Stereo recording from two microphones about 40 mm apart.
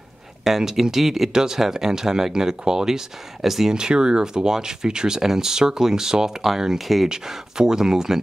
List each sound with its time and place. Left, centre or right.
0.4 s speech: centre
1.3 s speech: centre
3.7 s speech: right